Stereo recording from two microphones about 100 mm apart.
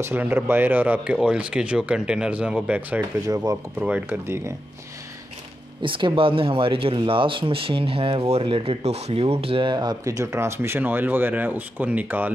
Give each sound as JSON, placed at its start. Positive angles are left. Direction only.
{"t": 0.0, "sound": "speech", "side_deg": -20}
{"t": 3.3, "sound": "speech", "side_deg": -35}
{"t": 3.8, "sound": "speech", "side_deg": -15}
{"t": 5.8, "sound": "speech", "side_deg": -55}
{"t": 10.0, "sound": "speech", "side_deg": -30}